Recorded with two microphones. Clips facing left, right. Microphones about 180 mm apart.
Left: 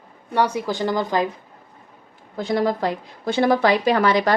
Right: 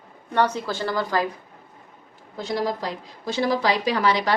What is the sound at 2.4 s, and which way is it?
A woman's voice, 55° left (ahead or behind).